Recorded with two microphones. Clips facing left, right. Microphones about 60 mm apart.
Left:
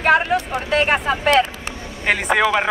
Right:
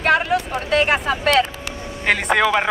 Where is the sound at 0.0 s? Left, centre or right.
Centre.